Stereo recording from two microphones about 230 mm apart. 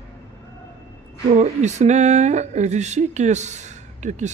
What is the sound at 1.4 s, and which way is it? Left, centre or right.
Speech, right.